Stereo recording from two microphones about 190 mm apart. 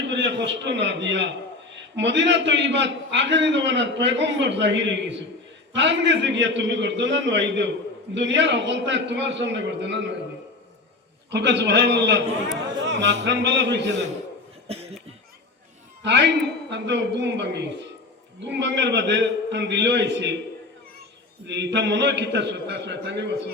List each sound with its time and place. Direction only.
0.1 s a man's voice: 70° right (ahead or behind)
11.3 s a man's voice: 65° right (ahead or behind)
16.0 s a man's voice: 65° right (ahead or behind)
21.4 s a man's voice: 65° right (ahead or behind)